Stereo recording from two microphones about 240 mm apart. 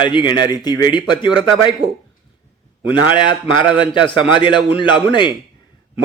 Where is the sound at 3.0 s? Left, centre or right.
Centre.